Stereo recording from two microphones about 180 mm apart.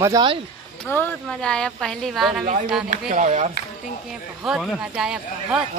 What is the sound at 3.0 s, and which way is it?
Speech, 45° right (ahead or behind).